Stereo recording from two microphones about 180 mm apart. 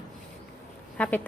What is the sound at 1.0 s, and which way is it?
Speech, 10° left (ahead or behind).